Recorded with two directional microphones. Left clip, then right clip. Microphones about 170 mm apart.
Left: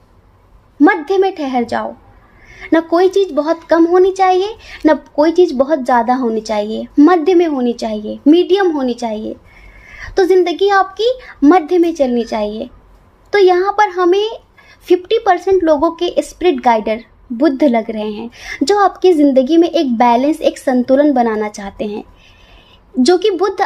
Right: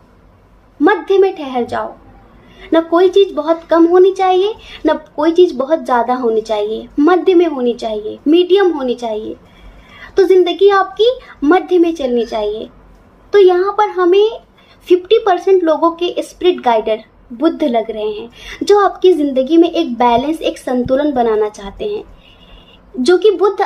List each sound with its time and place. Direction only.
0.7 s a woman's voice: 45° left (ahead or behind)
9.9 s a woman's voice: 50° left (ahead or behind)
23.0 s a woman's voice: 50° left (ahead or behind)